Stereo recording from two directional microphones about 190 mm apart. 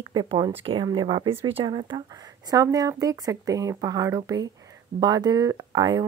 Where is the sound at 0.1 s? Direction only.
20° right (ahead or behind).